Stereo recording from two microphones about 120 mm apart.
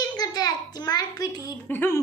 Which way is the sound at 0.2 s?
35° left (ahead or behind).